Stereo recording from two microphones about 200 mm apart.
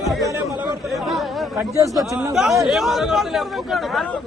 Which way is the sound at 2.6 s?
Centre (ahead or behind).